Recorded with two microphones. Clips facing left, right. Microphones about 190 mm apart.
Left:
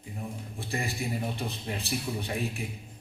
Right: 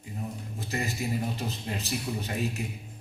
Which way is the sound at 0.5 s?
40° right (ahead or behind).